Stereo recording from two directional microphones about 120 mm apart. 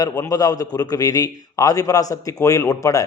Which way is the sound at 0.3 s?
30° left (ahead or behind).